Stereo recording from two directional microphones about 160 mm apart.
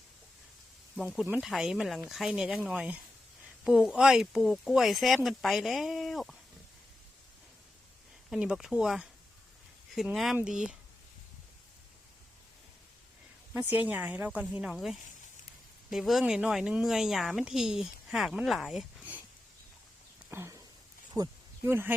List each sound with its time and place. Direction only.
0.9 s a woman's voice: centre (ahead or behind)
8.3 s a woman's voice: 5° right (ahead or behind)
13.5 s a woman's voice: 10° right (ahead or behind)
20.3 s a sound: 15° right (ahead or behind)